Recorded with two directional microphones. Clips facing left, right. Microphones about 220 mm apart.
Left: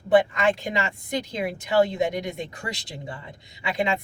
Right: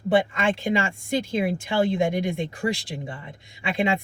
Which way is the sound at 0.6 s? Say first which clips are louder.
Right 4 dB; 25° right (ahead or behind).